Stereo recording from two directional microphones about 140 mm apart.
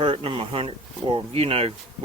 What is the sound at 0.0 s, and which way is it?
Speech, 40° right (ahead or behind).